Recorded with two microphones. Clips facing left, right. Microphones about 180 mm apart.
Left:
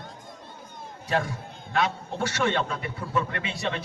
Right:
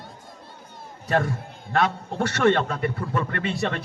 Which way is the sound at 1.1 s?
55° right (ahead or behind).